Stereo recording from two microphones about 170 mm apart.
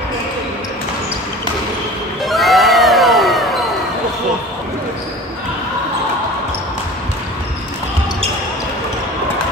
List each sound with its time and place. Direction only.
2.2 s crowd: centre (ahead or behind)